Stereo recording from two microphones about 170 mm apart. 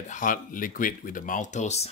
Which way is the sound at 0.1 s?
50° left (ahead or behind).